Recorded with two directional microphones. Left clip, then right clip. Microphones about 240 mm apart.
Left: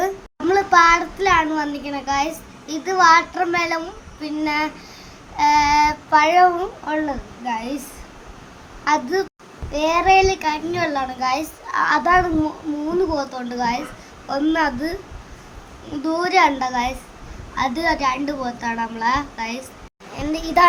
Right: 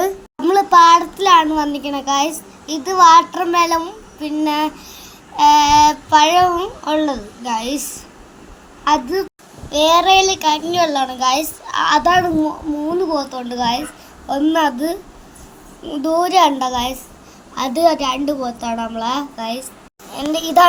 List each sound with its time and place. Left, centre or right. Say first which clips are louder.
0.0 s a child's voice: right 4 dB; centre
4.2 s child singing: right 4 dB; centre
8.8 s a woman's voice: right 3 dB; centre
9.7 s child singing: right 4 dB; centre
16.0 s child singing: right 3 dB; centre